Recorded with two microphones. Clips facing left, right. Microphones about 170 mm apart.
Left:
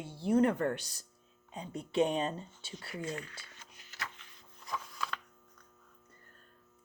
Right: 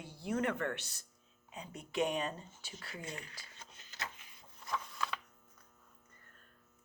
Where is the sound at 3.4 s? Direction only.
25° right (ahead or behind).